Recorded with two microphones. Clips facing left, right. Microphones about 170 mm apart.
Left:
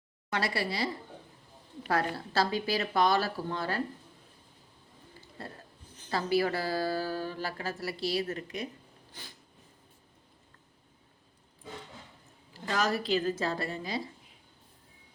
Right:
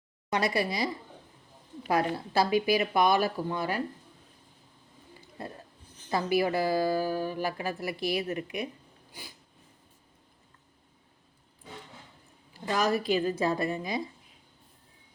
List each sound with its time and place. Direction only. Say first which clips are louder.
0.3 s a woman's voice: right 4 dB; 15° right (ahead or behind)
1.9 s a woman's voice: right 3 dB; 15° right (ahead or behind)
6.1 s a woman's voice: right 2 dB; 15° right (ahead or behind)
12.6 s a woman's voice: right 3 dB; 15° right (ahead or behind)